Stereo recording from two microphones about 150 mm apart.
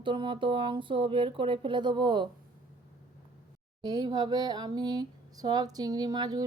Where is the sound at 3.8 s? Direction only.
25° right (ahead or behind).